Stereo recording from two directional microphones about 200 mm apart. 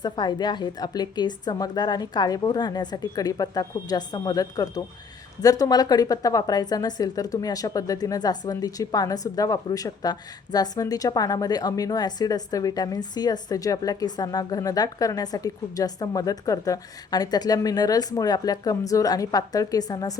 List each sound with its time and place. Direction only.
0.0 s a woman's voice: 20° left (ahead or behind)